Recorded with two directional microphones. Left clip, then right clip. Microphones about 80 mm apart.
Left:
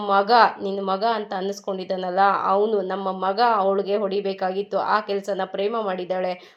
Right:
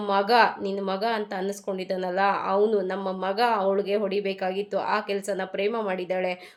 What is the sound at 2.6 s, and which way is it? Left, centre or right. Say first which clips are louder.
A woman's voice: left 2 dB; centre.